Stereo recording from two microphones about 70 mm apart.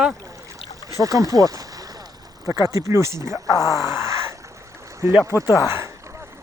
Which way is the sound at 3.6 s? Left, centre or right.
Left.